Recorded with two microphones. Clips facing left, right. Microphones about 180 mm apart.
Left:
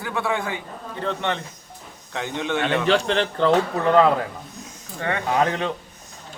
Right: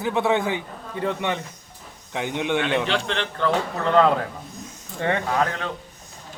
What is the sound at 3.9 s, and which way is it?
Speech, 5° left (ahead or behind).